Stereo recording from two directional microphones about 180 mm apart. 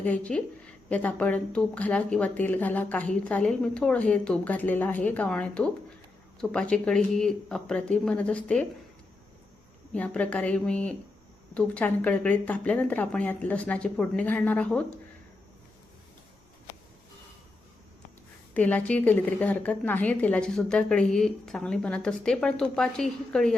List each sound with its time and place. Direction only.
0.0 s a woman's voice: 5° left (ahead or behind)
9.9 s a woman's voice: 5° left (ahead or behind)
18.5 s a woman's voice: 10° left (ahead or behind)